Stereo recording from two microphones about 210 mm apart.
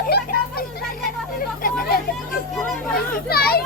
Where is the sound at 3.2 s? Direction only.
45° left (ahead or behind).